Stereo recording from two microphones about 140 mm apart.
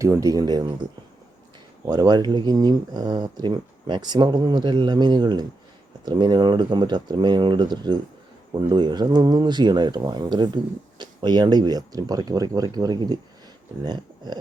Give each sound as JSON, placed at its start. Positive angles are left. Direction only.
{"t": 0.0, "sound": "speech", "side_deg": -25}
{"t": 1.8, "sound": "speech", "side_deg": -30}